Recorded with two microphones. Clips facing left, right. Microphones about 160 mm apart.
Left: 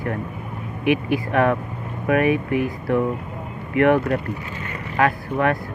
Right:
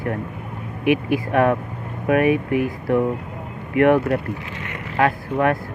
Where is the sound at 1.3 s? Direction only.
50° right (ahead or behind).